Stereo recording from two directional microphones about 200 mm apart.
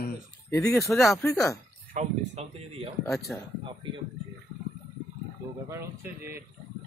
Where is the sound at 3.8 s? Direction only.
25° right (ahead or behind).